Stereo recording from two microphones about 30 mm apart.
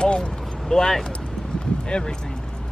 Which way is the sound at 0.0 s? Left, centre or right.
Left.